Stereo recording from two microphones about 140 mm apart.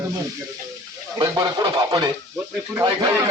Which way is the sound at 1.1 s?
25° right (ahead or behind).